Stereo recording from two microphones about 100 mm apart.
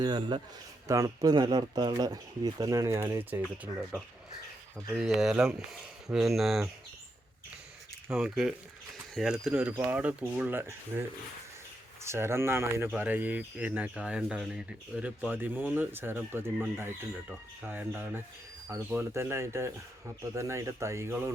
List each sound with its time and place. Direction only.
0.0 s a man's voice: 50° right (ahead or behind)
0.9 s speech: 35° right (ahead or behind)
4.9 s speech: 5° right (ahead or behind)
8.1 s speech: 5° right (ahead or behind); by 11.0 s 20° right (ahead or behind)
12.0 s speech: 25° right (ahead or behind)